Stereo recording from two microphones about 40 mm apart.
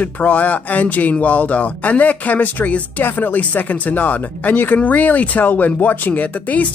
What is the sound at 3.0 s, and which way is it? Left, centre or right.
Speech, left.